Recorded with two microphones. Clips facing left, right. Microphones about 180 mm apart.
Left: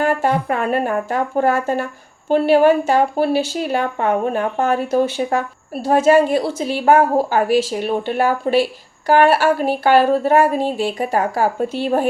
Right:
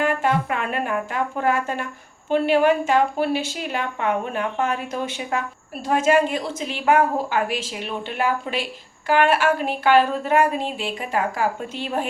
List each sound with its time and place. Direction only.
0.0 s speech: 40° left (ahead or behind)